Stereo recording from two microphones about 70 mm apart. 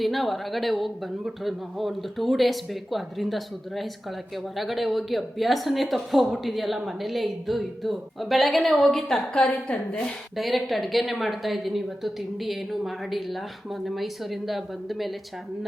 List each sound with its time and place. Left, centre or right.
0.0 s a woman's voice: centre
10.3 s speech: centre